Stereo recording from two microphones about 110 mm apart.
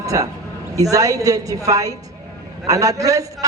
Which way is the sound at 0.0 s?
30° right (ahead or behind).